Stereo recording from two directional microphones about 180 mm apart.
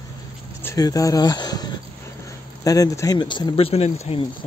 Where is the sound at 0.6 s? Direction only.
15° left (ahead or behind); by 3.9 s 35° left (ahead or behind).